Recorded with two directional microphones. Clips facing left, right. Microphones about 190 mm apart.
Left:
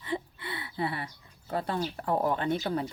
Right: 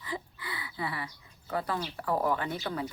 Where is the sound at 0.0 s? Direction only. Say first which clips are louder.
Left 4 dB; 25° left (ahead or behind).